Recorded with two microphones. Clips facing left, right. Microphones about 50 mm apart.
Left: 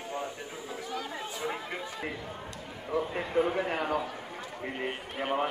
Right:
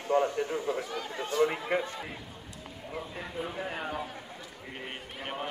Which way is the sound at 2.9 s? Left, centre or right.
Left.